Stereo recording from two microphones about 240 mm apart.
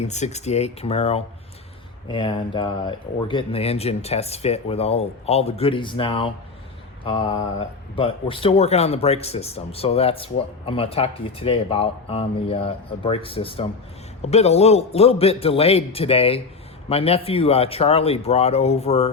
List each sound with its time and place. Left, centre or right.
0.0 s speech: left